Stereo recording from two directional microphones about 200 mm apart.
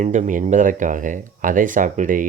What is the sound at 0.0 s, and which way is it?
Speech, 40° right (ahead or behind).